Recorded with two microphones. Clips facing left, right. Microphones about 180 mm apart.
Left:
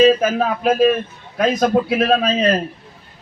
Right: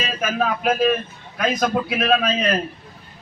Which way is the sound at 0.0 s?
30° left (ahead or behind).